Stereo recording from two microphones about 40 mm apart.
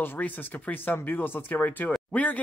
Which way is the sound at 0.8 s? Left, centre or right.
Left.